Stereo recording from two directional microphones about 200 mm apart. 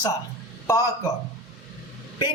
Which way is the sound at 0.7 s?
15° left (ahead or behind).